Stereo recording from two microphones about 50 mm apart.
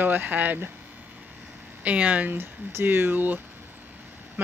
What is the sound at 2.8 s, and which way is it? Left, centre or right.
Speech, right.